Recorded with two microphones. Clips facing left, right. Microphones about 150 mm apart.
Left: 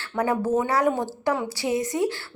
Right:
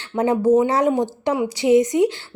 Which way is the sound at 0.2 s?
20° right (ahead or behind).